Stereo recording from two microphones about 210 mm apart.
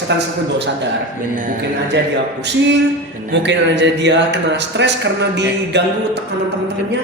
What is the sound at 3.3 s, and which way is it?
Speech, 60° right (ahead or behind).